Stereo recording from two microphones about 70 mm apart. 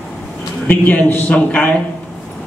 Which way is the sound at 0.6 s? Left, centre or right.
Left.